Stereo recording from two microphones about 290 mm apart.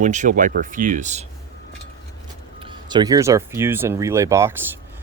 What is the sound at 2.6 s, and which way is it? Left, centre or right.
Speech, centre.